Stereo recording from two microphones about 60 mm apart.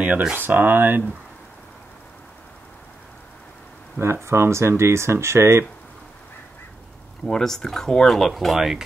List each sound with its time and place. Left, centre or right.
0.3 s speech: right
4.0 s speech: right
7.2 s speech: centre